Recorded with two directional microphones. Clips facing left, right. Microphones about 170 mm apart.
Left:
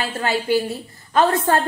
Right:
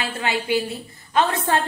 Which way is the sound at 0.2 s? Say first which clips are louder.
Left 3 dB; 40° left (ahead or behind).